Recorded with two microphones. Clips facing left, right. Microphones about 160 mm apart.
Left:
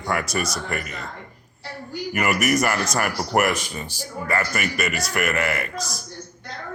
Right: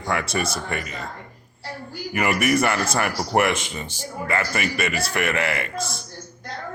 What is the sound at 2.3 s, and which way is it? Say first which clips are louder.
Speech: right 1 dB; 30° right (ahead or behind).